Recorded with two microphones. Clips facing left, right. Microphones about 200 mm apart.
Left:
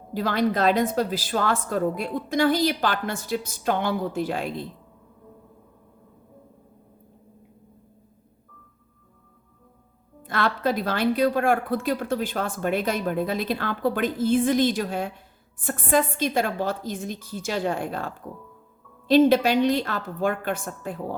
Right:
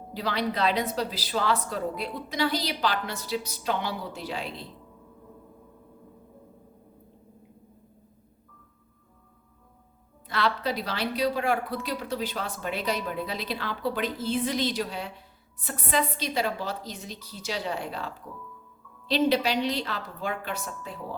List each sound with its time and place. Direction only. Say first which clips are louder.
0.1 s a woman's voice: left 6 dB; 50° left (ahead or behind)
10.2 s a woman's voice: left 3 dB; 50° left (ahead or behind)